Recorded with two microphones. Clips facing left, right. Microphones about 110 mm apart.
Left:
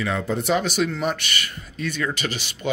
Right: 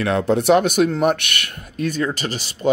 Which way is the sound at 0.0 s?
70° right (ahead or behind).